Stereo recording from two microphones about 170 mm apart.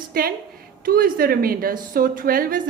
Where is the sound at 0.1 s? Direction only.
60° right (ahead or behind).